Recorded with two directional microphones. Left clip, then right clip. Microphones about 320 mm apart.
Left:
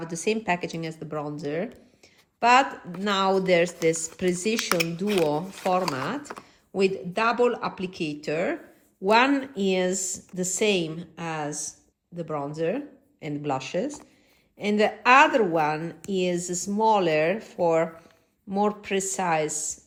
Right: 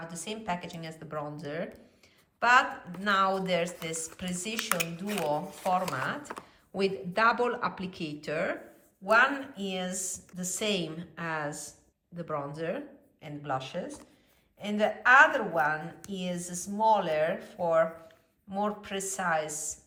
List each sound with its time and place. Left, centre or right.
0.1 s a woman's voice: centre